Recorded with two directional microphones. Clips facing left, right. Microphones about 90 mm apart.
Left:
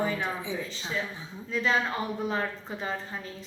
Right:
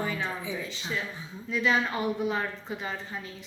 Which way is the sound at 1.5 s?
35° left (ahead or behind).